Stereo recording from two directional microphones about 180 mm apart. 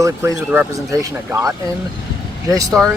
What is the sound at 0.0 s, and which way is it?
Speech, 15° right (ahead or behind).